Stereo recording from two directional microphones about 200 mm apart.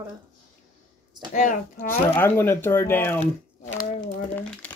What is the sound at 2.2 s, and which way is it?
Speech, 10° left (ahead or behind).